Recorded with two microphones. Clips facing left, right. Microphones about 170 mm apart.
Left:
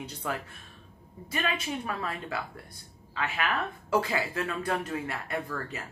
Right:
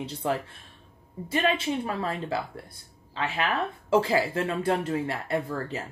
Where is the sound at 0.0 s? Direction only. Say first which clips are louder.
Right 6 dB; 25° right (ahead or behind).